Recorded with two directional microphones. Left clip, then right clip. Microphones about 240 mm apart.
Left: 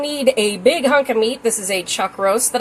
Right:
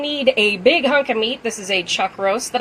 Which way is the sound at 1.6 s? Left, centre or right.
Left.